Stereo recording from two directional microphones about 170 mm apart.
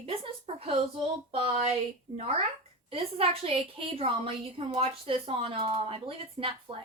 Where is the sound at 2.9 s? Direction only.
35° right (ahead or behind).